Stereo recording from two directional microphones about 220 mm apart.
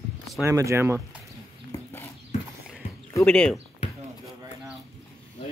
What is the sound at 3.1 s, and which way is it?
Speech, 5° left (ahead or behind).